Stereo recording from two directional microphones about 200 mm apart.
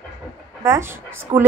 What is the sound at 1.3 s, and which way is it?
Speech, 30° right (ahead or behind).